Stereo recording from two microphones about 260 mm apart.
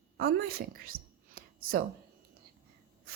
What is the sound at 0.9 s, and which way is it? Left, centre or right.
Whispering, right.